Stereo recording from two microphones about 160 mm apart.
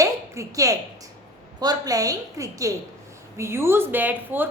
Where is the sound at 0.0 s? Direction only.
20° right (ahead or behind).